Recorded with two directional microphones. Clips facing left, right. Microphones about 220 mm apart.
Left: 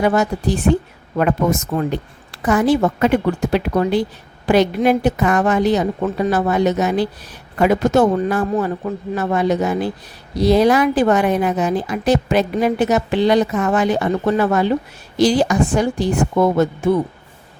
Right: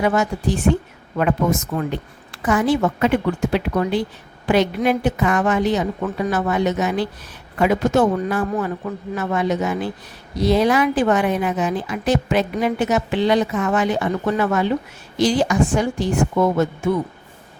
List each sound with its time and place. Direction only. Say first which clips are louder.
0.0 s speech: left 2 dB; 35° left (ahead or behind)